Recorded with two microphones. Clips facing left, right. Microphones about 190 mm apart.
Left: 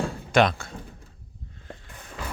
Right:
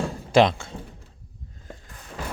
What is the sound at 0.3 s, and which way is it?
Speech, 25° right (ahead or behind).